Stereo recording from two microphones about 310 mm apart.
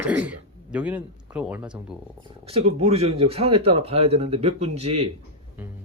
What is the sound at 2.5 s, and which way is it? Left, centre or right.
Speech, centre.